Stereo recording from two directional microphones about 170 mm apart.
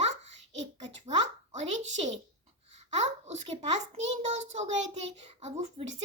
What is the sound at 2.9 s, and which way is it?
A child's voice, 40° right (ahead or behind).